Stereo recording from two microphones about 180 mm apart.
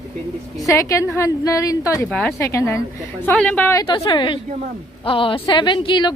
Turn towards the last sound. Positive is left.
turn(degrees=25)  # may be behind; listen again after turning